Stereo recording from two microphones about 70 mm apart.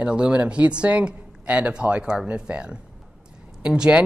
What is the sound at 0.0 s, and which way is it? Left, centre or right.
Speech, centre.